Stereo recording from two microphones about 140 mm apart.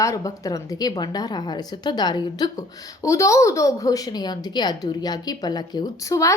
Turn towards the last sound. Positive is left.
turn(degrees=25)  # may be behind; listen again after turning